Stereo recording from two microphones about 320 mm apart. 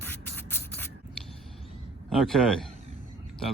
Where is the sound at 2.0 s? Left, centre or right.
Centre.